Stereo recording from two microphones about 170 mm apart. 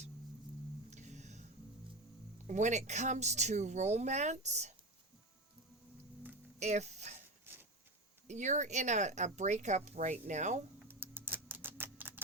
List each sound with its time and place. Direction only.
0.9 s music: 45° right (ahead or behind)
2.5 s speech: 45° right (ahead or behind)
6.6 s speech: 40° right (ahead or behind)
7.5 s a sound: 15° right (ahead or behind)
8.3 s speech: 45° right (ahead or behind)
10.8 s typing: 15° right (ahead or behind)